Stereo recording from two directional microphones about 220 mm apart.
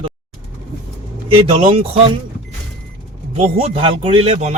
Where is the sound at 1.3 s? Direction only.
25° right (ahead or behind).